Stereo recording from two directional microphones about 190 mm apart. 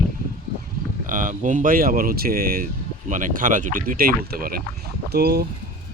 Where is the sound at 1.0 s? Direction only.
45° right (ahead or behind).